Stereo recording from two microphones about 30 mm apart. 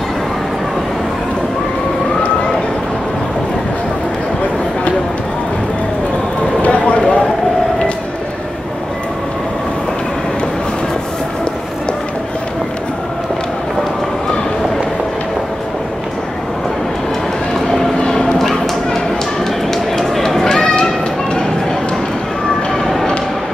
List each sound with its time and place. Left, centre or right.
6.7 s a sound: left
18.0 s bow-wow: centre
19.7 s run: centre